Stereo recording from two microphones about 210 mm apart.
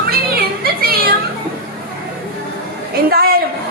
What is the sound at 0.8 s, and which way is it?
Children playing, 45° right (ahead or behind).